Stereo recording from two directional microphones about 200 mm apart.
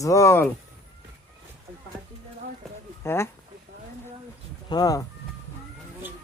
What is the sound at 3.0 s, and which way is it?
Speech, 10° left (ahead or behind).